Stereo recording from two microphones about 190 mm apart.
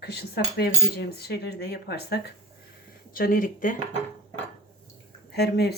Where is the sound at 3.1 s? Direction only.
45° left (ahead or behind).